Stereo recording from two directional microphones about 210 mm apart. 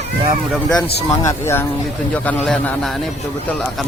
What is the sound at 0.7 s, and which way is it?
A man's voice, 20° left (ahead or behind).